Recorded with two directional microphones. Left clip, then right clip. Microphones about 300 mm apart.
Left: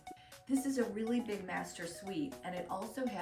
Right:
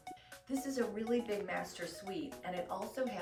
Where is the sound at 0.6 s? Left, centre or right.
Centre.